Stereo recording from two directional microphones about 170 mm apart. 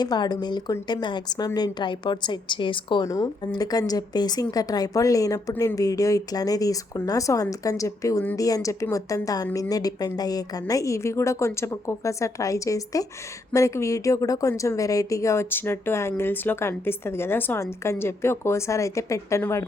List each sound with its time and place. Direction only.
0.0 s a woman's voice: 25° left (ahead or behind)